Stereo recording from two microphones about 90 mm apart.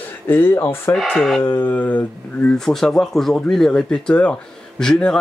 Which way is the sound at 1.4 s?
25° left (ahead or behind).